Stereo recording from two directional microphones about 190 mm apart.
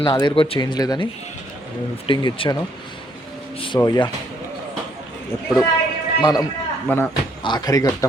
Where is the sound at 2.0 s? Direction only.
25° left (ahead or behind).